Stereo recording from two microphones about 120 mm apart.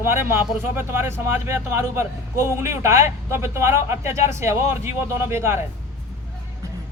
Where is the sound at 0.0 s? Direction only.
20° right (ahead or behind).